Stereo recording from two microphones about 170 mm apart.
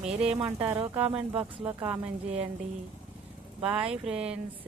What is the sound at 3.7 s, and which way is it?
Speech, 5° right (ahead or behind).